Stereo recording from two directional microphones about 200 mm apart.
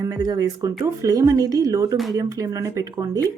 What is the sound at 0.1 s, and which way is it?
Speech, 20° right (ahead or behind).